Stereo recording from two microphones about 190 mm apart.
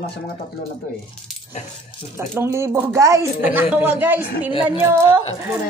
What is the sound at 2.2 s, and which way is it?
A woman's voice, 15° right (ahead or behind).